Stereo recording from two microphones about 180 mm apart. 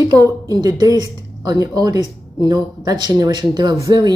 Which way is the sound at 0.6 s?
20° right (ahead or behind).